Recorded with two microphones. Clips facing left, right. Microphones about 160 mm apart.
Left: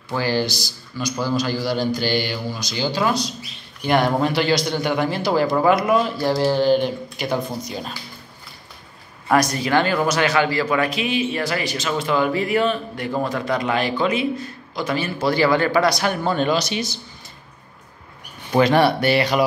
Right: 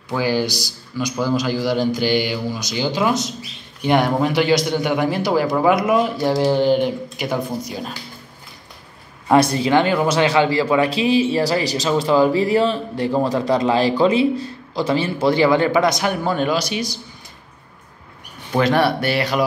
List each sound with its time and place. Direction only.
0.1 s a man's voice: 10° right (ahead or behind)
7.2 s a man's voice: 5° right (ahead or behind)
9.3 s a man's voice: 25° right (ahead or behind); by 16.8 s 10° right (ahead or behind)
18.6 s speech: centre (ahead or behind)